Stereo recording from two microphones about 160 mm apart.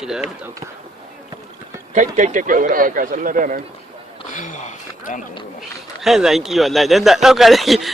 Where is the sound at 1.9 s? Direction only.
50° right (ahead or behind).